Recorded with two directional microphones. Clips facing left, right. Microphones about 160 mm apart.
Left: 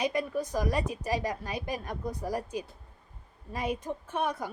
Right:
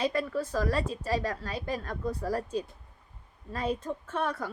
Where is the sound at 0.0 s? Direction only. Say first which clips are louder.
Right 1 dB; 15° left (ahead or behind).